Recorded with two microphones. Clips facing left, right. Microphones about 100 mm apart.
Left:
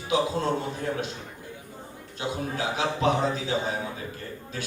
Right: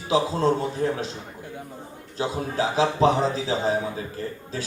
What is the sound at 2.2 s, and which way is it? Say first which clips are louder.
A man's voice: right 5 dB; 30° right (ahead or behind).